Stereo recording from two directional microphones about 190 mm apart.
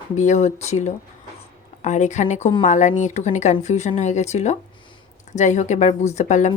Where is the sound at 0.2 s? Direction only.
35° left (ahead or behind).